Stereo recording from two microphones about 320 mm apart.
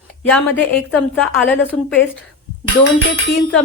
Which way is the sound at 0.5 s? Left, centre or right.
Centre.